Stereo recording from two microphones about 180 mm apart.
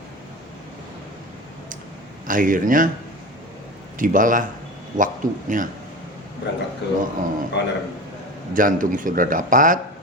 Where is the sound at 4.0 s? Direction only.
50° right (ahead or behind).